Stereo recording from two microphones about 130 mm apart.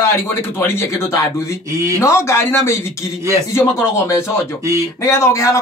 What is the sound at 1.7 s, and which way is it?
Speech, 25° right (ahead or behind).